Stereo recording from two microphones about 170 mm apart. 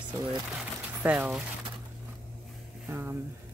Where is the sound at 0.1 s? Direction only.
25° right (ahead or behind).